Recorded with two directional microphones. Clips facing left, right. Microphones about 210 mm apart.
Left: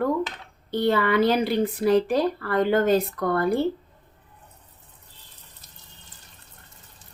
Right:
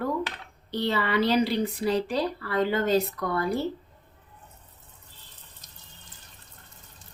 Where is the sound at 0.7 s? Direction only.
55° left (ahead or behind).